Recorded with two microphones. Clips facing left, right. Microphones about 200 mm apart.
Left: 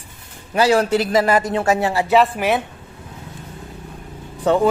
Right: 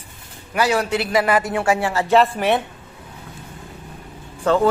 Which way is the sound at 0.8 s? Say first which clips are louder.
Left 3 dB; 40° left (ahead or behind).